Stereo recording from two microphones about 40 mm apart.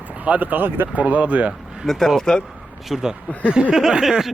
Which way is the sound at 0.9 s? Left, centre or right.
Right.